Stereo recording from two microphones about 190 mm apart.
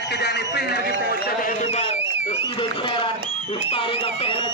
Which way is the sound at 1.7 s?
35° left (ahead or behind).